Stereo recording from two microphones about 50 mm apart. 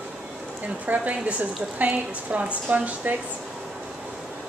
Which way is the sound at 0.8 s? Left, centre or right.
Right.